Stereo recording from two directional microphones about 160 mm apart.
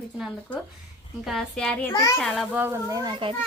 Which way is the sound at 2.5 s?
15° right (ahead or behind).